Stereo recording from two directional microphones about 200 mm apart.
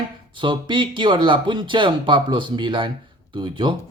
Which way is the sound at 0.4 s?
25° right (ahead or behind).